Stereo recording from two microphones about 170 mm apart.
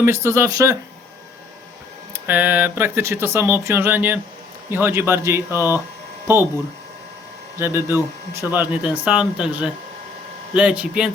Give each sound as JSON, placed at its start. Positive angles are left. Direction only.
{"t": 0.0, "sound": "speech", "side_deg": -15}
{"t": 2.1, "sound": "speech", "side_deg": -10}
{"t": 7.6, "sound": "speech", "side_deg": -15}